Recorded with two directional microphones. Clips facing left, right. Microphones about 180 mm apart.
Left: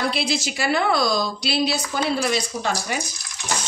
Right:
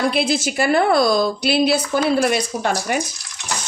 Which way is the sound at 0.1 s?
50° right (ahead or behind).